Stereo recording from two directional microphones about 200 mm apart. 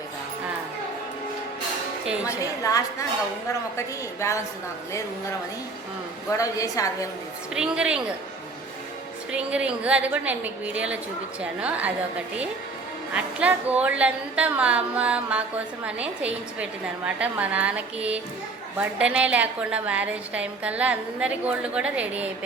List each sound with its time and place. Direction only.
2.2 s a woman's voice: 15° left (ahead or behind)
6.3 s a woman's voice: 15° left (ahead or behind)
7.5 s a woman's voice: 5° right (ahead or behind)
9.3 s a woman's voice: 5° right (ahead or behind)
13.1 s a woman's voice: 5° right (ahead or behind)